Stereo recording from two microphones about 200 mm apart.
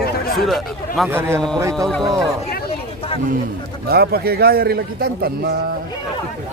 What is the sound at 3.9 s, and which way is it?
A man's voice, 50° right (ahead or behind).